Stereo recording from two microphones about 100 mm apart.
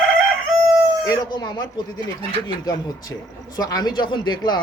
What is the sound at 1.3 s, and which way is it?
Speech, 45° left (ahead or behind).